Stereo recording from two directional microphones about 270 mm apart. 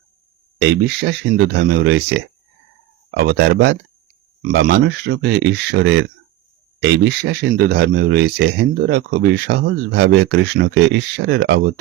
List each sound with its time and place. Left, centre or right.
0.6 s speech: right